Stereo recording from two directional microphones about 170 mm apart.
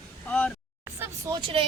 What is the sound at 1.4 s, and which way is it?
Speech, 30° right (ahead or behind).